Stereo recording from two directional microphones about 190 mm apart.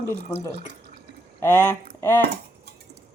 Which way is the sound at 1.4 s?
10° left (ahead or behind).